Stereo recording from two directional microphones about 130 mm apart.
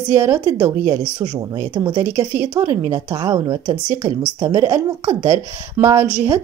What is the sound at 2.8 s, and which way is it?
Speech, 30° right (ahead or behind).